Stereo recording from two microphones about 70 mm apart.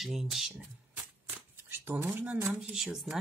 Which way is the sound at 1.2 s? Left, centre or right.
Right.